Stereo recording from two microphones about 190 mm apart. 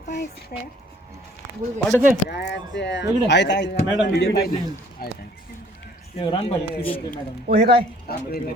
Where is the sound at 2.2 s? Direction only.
60° left (ahead or behind).